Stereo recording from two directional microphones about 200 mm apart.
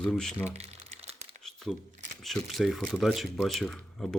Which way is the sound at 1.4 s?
Centre (ahead or behind).